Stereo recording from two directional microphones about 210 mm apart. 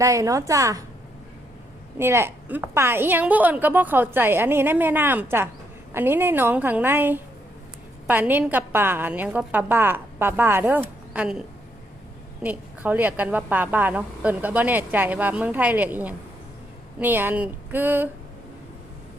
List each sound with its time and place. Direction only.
0.0 s a woman's voice: 15° right (ahead or behind)
2.0 s a woman's voice: 10° right (ahead or behind)